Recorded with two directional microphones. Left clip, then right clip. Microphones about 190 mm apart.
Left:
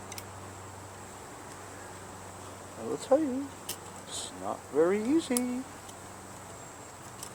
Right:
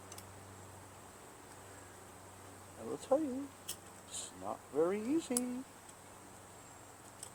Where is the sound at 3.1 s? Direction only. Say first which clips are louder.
Left 7 dB; 25° left (ahead or behind).